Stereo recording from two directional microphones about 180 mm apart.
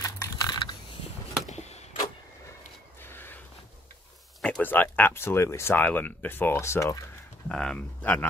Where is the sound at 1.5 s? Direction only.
35° left (ahead or behind).